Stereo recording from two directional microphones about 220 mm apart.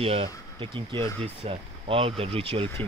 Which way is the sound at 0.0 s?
25° right (ahead or behind).